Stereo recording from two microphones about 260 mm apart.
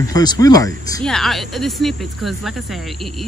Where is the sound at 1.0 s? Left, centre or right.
Centre.